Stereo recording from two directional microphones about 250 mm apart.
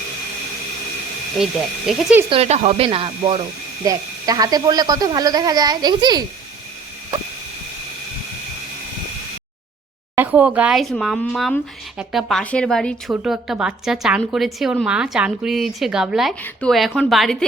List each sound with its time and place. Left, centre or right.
1.9 s speech: centre
2.3 s speech: right
10.2 s speech: centre